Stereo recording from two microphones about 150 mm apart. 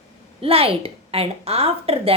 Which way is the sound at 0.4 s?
40° right (ahead or behind).